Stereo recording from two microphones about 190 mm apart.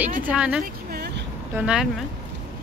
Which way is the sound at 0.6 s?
50° right (ahead or behind).